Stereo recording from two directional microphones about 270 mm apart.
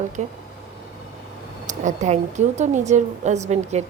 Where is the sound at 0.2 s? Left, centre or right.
Right.